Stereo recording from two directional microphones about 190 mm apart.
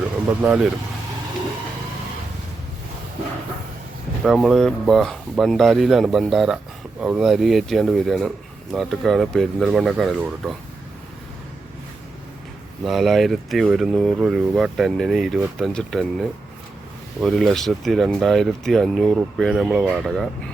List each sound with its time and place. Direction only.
0.4 s speech: 5° right (ahead or behind)
4.2 s speech: centre (ahead or behind)
12.8 s speech: centre (ahead or behind)